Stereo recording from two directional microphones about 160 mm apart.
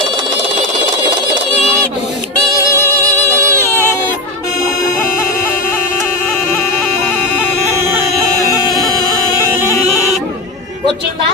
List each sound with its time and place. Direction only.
2.5 s music: 20° left (ahead or behind)
3.0 s music: 15° right (ahead or behind)
8.5 s a sound: 25° left (ahead or behind)